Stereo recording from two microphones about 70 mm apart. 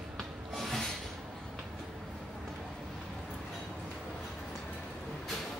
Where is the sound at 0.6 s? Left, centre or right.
Centre.